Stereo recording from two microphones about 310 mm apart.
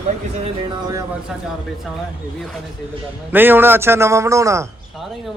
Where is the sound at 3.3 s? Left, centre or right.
Centre.